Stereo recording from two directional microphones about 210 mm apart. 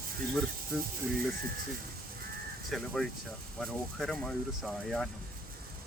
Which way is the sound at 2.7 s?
Centre (ahead or behind).